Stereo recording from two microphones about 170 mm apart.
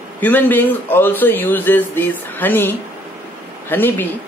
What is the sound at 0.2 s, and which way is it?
Speech, 10° left (ahead or behind).